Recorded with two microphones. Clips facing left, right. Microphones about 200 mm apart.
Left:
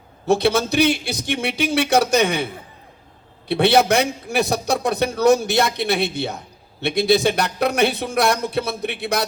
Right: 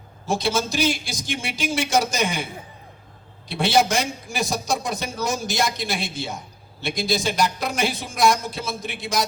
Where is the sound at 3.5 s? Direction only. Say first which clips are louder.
Left 5 dB; 65° left (ahead or behind).